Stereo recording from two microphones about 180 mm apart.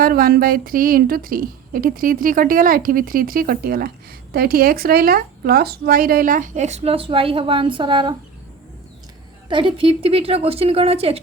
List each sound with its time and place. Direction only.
0.0 s a woman's voice: 55° right (ahead or behind); by 8.1 s 25° right (ahead or behind)
9.5 s speech: 30° right (ahead or behind)